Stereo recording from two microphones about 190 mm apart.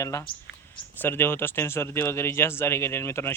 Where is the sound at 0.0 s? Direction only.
15° left (ahead or behind).